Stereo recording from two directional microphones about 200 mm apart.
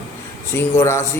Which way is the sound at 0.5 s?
10° left (ahead or behind).